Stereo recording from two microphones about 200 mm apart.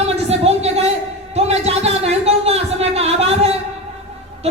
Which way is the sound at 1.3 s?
30° right (ahead or behind).